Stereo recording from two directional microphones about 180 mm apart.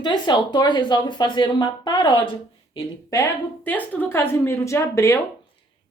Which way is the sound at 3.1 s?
15° left (ahead or behind).